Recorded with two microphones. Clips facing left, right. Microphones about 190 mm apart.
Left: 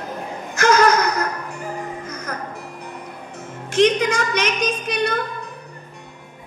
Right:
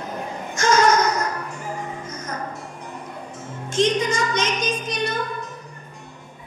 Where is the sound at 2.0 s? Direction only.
60° left (ahead or behind).